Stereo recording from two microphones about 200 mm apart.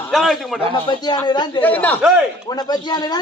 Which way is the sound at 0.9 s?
20° left (ahead or behind).